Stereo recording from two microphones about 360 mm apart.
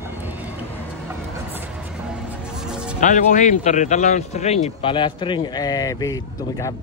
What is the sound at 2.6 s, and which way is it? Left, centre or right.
Music, centre.